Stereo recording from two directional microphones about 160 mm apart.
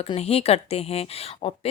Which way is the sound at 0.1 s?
40° left (ahead or behind).